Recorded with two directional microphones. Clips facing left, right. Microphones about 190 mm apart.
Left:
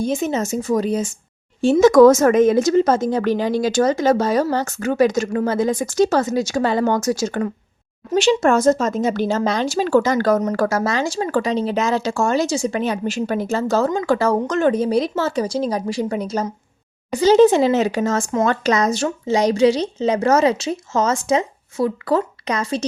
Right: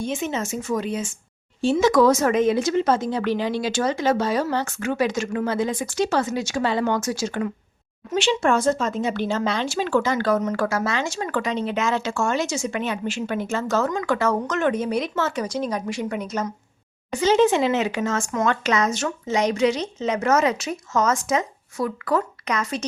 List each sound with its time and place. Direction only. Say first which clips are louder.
0.0 s speech: left 5 dB; 40° left (ahead or behind)